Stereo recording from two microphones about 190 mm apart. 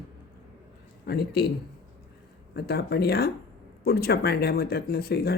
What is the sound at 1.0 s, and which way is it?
Speech, 60° left (ahead or behind).